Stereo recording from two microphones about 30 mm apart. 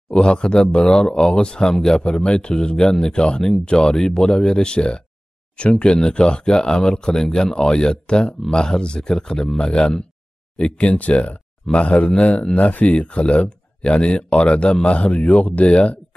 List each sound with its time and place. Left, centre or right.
0.1 s speech: left
2.0 s speech: left
10.6 s speech: left
12.9 s speech: left